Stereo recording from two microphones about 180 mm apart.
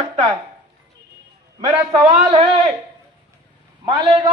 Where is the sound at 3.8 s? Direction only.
30° right (ahead or behind).